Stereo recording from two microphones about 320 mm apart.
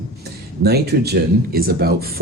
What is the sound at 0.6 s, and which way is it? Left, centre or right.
Speech, right.